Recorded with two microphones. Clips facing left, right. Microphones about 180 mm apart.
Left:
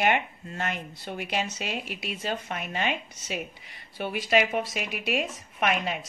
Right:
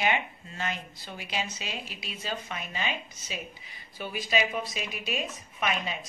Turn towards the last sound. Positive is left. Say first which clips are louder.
# left 4 dB
turn(degrees=60)  # may be behind; listen again after turning